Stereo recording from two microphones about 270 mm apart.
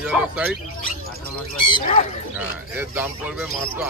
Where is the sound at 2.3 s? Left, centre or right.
Centre.